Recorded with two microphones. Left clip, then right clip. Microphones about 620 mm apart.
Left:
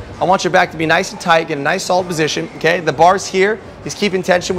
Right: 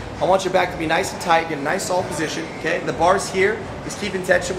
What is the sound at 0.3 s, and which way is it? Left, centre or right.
Speech, left.